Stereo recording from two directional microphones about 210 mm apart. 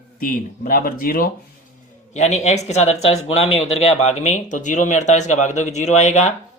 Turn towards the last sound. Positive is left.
turn(degrees=30)  # may be behind; listen again after turning